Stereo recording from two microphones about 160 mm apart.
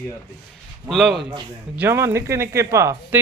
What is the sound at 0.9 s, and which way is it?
Speech, centre (ahead or behind).